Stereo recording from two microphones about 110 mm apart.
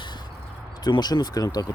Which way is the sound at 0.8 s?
40° left (ahead or behind).